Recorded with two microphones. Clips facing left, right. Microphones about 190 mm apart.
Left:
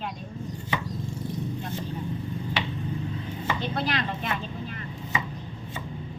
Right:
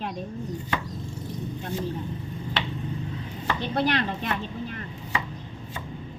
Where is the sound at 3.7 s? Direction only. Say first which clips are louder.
Right 4 dB; 40° right (ahead or behind).